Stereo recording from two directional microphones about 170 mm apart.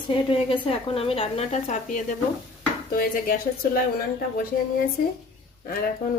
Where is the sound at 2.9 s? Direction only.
60° left (ahead or behind).